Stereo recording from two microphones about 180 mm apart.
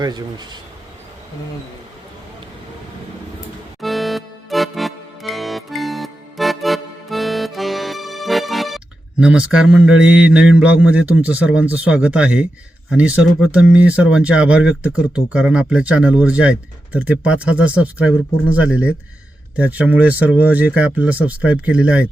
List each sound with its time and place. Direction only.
0.0 s speech: 25° right (ahead or behind)
3.8 s music: centre (ahead or behind)
12.9 s speech: 5° right (ahead or behind)